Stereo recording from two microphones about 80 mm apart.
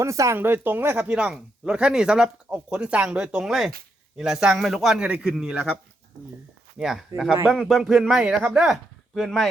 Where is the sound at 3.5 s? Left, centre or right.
Centre.